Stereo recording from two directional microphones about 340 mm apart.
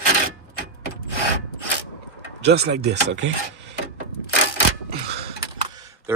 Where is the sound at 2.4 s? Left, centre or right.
Right.